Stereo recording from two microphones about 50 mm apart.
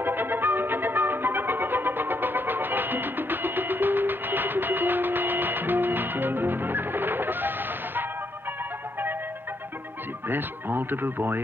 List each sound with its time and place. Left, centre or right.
0.0 s music: right
10.2 s speech: right